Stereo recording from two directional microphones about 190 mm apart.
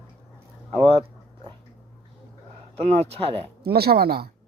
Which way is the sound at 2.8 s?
35° right (ahead or behind).